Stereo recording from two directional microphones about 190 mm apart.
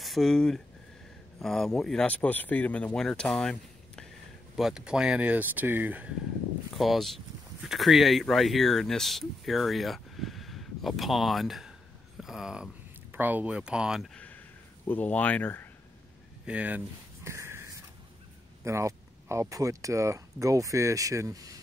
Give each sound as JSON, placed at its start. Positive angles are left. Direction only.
{"t": 0.0, "sound": "speech", "side_deg": 0}
{"t": 16.4, "sound": "a sound", "side_deg": -5}
{"t": 18.6, "sound": "speech", "side_deg": -15}